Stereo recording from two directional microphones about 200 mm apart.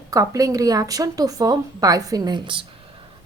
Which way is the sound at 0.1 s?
15° right (ahead or behind).